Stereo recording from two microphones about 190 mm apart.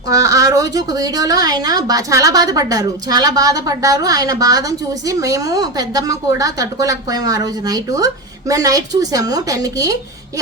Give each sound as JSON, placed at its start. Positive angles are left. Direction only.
{"t": 0.1, "sound": "a woman's voice", "side_deg": -20}